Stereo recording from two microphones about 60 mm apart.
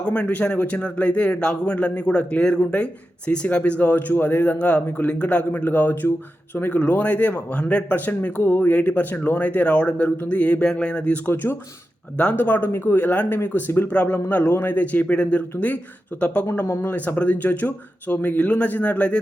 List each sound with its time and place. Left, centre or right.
0.0 s speech: centre
11.4 s a man's voice: left
12.1 s speech: left
12.7 s speech: left
13.0 s speech: left
13.8 s speech: left
16.6 s a man's voice: left
17.2 s speech: left